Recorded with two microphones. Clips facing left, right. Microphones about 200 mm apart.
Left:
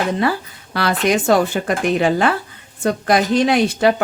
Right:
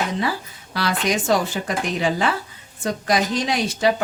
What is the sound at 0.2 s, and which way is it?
A woman's voice, 60° left (ahead or behind).